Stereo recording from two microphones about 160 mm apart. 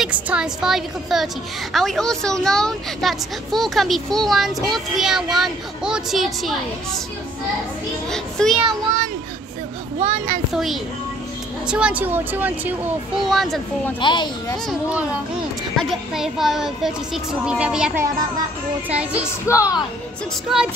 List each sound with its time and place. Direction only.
0.0 s a woman's voice: 5° right (ahead or behind)
8.1 s a woman's voice: 5° left (ahead or behind)
9.9 s speech: 40° right (ahead or behind)
10.5 s a woman's voice: centre (ahead or behind)
13.2 s a woman's voice: centre (ahead or behind)
13.9 s a child's voice: 30° left (ahead or behind)
14.7 s a woman's voice: 5° right (ahead or behind)
19.5 s a child's voice: 20° left (ahead or behind)
20.5 s a woman's voice: centre (ahead or behind)